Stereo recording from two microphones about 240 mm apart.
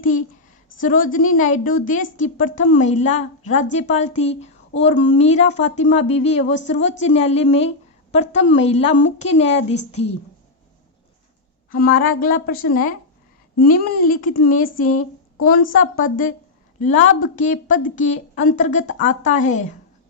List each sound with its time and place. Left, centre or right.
0.8 s speech: left
11.7 s speech: left